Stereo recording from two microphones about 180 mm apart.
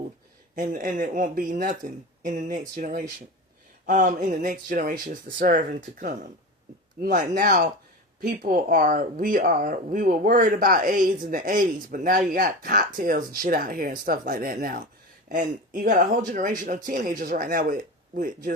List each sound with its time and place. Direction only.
0.5 s speech: 50° right (ahead or behind)